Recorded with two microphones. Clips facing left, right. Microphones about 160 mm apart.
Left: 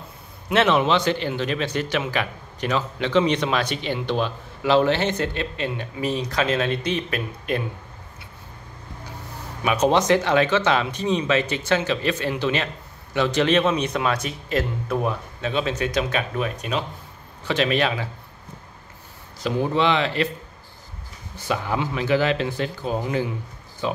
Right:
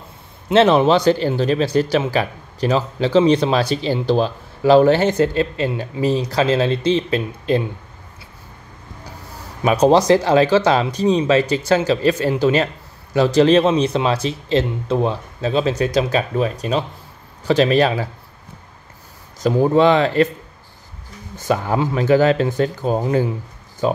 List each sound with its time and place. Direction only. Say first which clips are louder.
0.5 s speech: right 6 dB; 30° right (ahead or behind)
9.6 s speech: right 6 dB; 35° right (ahead or behind)
19.4 s speech: right 7 dB; 45° right (ahead or behind)
21.4 s speech: right 6 dB; 45° right (ahead or behind)